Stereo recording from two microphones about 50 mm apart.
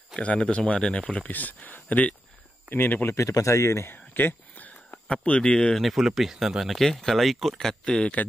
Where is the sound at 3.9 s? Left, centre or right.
Left.